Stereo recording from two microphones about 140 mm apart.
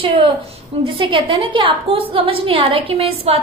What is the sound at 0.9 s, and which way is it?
A woman's voice, 35° right (ahead or behind).